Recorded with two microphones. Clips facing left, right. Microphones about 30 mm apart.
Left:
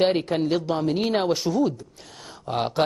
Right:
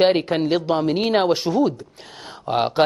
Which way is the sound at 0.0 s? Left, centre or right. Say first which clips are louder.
Right 4 dB; right.